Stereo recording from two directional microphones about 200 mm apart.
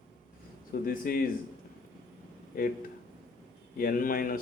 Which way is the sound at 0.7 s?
45° left (ahead or behind).